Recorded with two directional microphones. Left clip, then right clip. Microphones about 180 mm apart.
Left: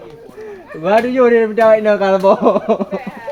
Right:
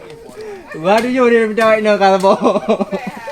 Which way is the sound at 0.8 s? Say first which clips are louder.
Left 1 dB; 45° right (ahead or behind).